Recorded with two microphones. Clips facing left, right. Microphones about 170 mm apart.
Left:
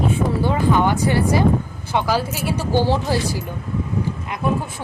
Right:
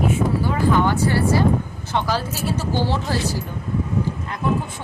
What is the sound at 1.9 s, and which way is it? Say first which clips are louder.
A woman's voice: left 3 dB; 10° left (ahead or behind).